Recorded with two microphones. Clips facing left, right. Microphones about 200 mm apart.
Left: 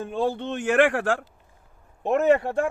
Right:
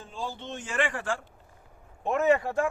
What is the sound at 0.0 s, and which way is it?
Speech, 60° left (ahead or behind).